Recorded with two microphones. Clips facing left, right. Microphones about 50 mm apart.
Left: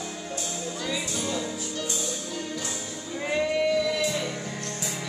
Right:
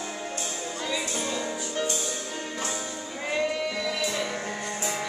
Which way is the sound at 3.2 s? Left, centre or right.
Centre.